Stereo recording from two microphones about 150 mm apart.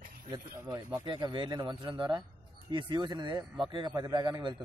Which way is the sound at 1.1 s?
30° right (ahead or behind).